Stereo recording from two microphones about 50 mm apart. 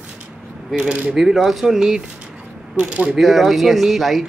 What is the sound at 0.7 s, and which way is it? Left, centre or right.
Speech, centre.